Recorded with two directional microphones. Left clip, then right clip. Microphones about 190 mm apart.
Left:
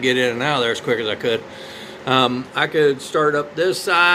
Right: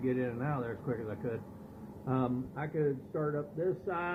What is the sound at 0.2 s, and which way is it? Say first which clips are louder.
A man's voice: left 18 dB; 20° left (ahead or behind).